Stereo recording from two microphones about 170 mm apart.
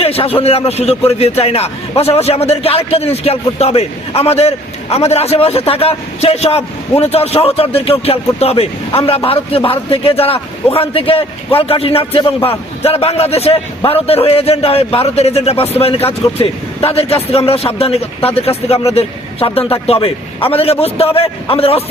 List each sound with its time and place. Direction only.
0.0 s a man's voice: 35° left (ahead or behind)